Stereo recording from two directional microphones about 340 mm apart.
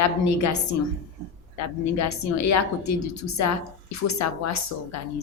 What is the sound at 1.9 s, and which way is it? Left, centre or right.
Speech, left.